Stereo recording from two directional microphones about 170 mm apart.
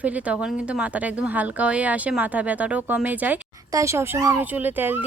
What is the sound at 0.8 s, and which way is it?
Speech, 5° right (ahead or behind).